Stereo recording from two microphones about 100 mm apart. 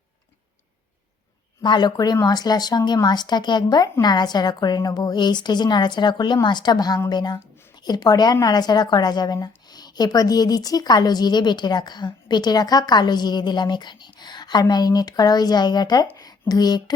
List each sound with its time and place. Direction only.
1.6 s a woman's voice: 45° left (ahead or behind)